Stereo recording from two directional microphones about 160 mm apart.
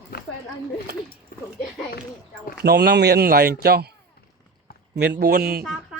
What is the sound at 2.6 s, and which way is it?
Speech, 90° right.